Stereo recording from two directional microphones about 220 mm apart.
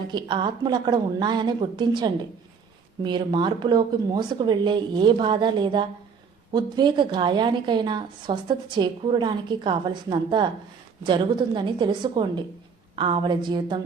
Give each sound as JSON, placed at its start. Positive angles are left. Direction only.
{"t": 0.1, "sound": "a woman's voice", "side_deg": -20}